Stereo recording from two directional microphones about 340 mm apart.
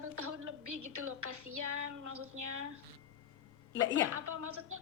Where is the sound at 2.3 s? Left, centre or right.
Right.